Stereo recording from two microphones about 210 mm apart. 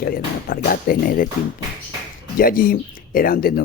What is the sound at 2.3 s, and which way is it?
Speech, 45° left (ahead or behind).